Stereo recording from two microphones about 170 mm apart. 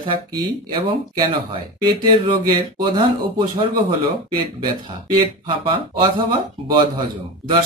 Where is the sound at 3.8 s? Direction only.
30° right (ahead or behind).